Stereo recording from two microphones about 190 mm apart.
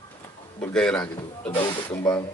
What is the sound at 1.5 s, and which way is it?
Speech, 25° left (ahead or behind).